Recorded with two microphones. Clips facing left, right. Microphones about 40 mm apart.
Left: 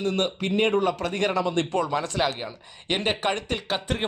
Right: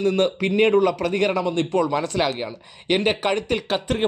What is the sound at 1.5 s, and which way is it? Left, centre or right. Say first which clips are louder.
Speech: right 4 dB; left.